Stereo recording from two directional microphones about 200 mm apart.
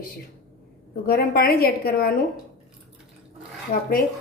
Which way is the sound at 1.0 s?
50° left (ahead or behind).